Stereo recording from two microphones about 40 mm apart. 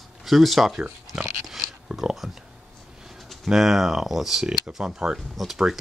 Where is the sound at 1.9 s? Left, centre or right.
Centre.